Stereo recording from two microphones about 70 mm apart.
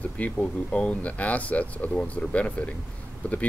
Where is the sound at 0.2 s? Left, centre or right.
Centre.